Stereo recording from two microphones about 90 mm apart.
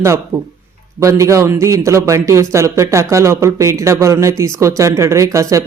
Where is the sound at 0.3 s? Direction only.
40° right (ahead or behind).